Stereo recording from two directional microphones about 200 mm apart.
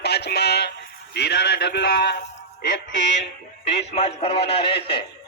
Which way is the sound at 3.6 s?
30° left (ahead or behind).